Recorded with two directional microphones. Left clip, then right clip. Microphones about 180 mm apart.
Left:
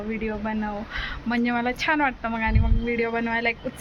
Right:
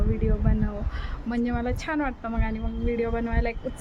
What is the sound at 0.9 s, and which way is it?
A woman's voice, 5° right (ahead or behind).